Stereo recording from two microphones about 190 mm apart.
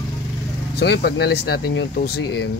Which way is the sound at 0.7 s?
60° left (ahead or behind).